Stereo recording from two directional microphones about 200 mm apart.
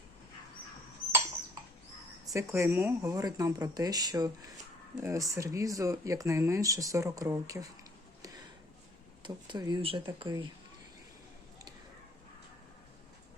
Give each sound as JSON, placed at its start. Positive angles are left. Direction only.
{"t": 2.2, "sound": "speech", "side_deg": -15}
{"t": 9.2, "sound": "speech", "side_deg": -20}